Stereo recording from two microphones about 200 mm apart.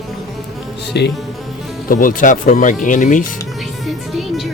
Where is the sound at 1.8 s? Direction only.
45° left (ahead or behind).